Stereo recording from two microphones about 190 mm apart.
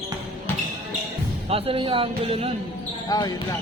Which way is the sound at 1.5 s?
30° right (ahead or behind).